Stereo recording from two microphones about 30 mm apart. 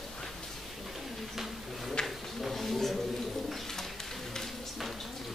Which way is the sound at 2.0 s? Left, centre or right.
Left.